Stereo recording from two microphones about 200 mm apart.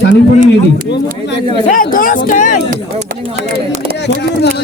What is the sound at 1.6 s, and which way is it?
Speech, 45° left (ahead or behind).